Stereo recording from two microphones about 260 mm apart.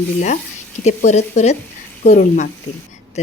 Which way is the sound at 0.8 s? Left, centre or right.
Left.